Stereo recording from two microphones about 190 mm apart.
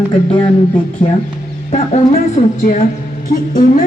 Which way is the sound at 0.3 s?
30° left (ahead or behind).